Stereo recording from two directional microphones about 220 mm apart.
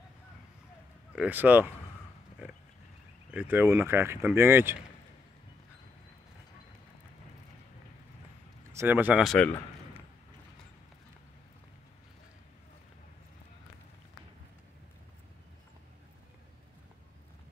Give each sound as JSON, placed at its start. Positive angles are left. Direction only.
{"t": 1.1, "sound": "speech", "side_deg": -5}
{"t": 3.3, "sound": "speech", "side_deg": -10}
{"t": 8.7, "sound": "speech", "side_deg": -10}